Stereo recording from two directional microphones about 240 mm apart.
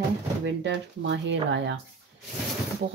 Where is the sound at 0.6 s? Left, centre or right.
Right.